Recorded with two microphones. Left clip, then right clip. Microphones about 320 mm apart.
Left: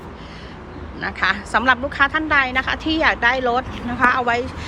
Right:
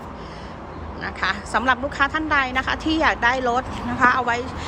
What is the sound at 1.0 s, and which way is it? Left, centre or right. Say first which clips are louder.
A woman's voice: left 4 dB; centre.